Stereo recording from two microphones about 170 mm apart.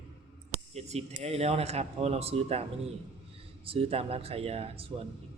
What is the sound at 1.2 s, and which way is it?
Speech, 40° right (ahead or behind).